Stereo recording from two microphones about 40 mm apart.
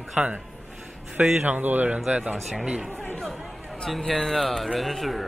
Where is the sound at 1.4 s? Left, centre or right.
Right.